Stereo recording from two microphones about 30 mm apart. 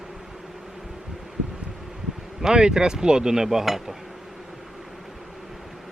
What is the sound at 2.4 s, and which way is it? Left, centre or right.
Speech, right.